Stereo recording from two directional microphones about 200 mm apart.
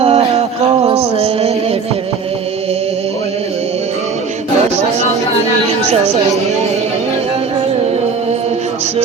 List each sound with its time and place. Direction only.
0.0 s music: 30° right (ahead or behind)